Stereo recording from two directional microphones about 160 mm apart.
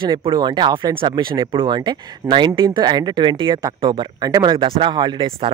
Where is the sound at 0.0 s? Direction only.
30° right (ahead or behind).